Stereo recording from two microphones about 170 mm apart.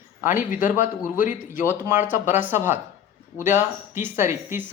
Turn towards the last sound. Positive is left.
turn(degrees=-15)  # may be behind; listen again after turning